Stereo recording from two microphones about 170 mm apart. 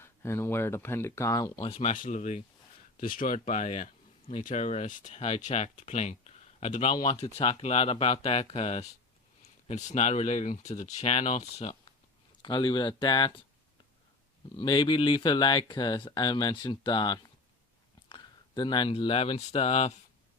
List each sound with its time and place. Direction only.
0.0 s speech: 15° left (ahead or behind)
1.6 s speech: 35° left (ahead or behind)
12.4 s speech: 25° left (ahead or behind)
14.5 s speech: 25° left (ahead or behind)